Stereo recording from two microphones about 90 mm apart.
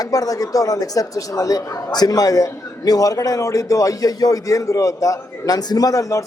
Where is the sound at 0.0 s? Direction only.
40° left (ahead or behind).